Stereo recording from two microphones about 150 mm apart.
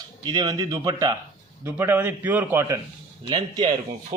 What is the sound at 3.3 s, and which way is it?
Speech, 30° right (ahead or behind).